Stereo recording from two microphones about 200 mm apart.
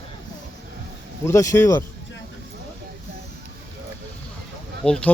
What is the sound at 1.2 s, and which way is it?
Speech, 15° left (ahead or behind).